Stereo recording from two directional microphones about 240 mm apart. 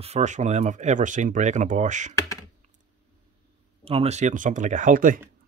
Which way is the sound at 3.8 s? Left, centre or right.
Right.